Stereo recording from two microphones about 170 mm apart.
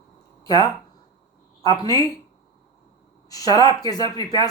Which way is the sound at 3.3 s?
20° left (ahead or behind).